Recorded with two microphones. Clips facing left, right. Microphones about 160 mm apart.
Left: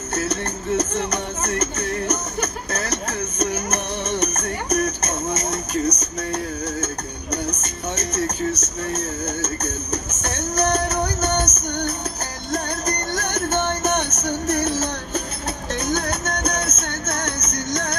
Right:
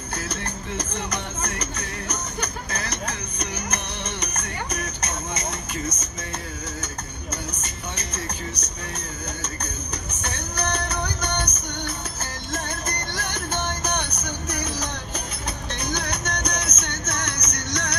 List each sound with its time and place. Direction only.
0.7 s music: 45° left (ahead or behind)